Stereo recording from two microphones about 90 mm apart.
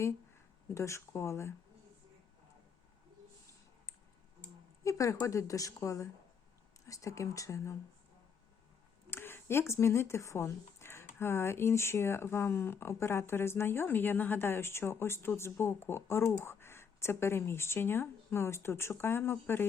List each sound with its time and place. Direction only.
0.7 s speech: 30° left (ahead or behind)
4.8 s speech: 35° left (ahead or behind)
9.0 s speech: 25° left (ahead or behind)